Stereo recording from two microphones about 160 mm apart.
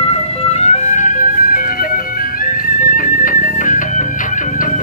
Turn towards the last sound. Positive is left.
turn(degrees=55)  # may be behind; listen again after turning